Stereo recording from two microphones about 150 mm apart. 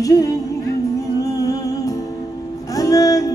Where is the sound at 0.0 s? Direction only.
25° left (ahead or behind).